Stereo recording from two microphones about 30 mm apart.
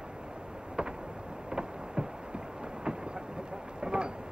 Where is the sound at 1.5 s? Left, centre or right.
Right.